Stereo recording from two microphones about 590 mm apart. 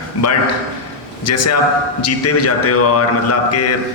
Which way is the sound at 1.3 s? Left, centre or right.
Left.